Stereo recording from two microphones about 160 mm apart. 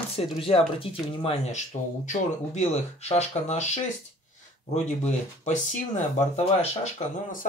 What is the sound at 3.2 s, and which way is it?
Speech, 45° left (ahead or behind).